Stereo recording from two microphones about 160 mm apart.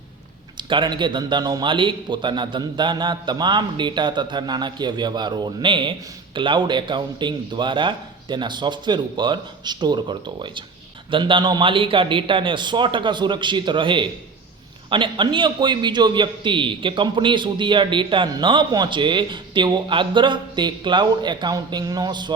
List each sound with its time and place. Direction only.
0.5 s a man's voice: 30° right (ahead or behind)